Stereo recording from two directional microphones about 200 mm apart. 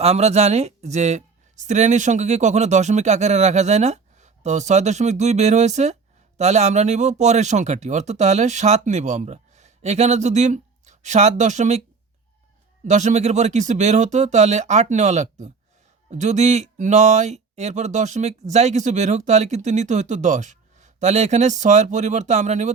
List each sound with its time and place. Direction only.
0.0 s speech: 30° right (ahead or behind)
12.8 s speech: 35° right (ahead or behind)